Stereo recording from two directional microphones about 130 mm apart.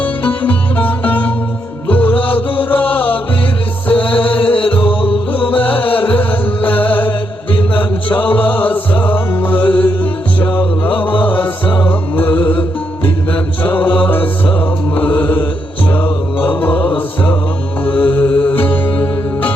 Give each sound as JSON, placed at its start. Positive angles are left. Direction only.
{"t": 0.0, "sound": "music", "side_deg": 15}
{"t": 3.9, "sound": "music", "side_deg": 40}
{"t": 5.5, "sound": "music", "side_deg": 15}
{"t": 8.1, "sound": "music", "side_deg": 15}
{"t": 13.3, "sound": "mantra", "side_deg": 15}
{"t": 14.1, "sound": "music", "side_deg": 15}
{"t": 14.9, "sound": "mantra", "side_deg": 15}
{"t": 18.3, "sound": "music", "side_deg": 15}